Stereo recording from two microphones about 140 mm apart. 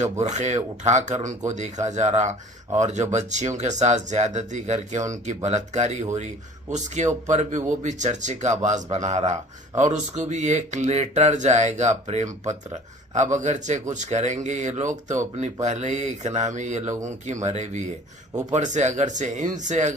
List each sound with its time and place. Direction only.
0.0 s speech: 55° right (ahead or behind)